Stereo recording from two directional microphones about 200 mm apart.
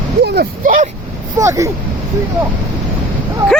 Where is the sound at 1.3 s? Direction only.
15° right (ahead or behind).